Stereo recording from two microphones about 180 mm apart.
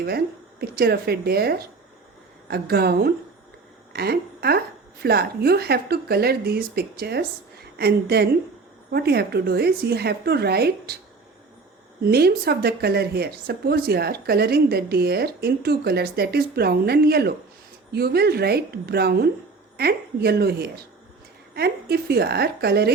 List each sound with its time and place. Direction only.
0.6 s a woman's voice: 60° right (ahead or behind)
12.0 s speech: 60° right (ahead or behind)